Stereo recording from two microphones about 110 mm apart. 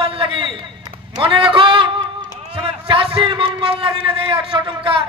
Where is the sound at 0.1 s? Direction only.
55° right (ahead or behind).